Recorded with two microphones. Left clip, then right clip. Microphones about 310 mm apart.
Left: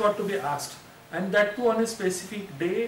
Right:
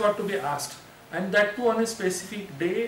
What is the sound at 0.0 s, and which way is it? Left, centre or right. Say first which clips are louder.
A man's voice: even; centre.